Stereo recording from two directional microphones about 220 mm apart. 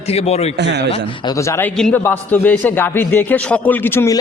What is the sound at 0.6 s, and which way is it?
Speech, 50° right (ahead or behind).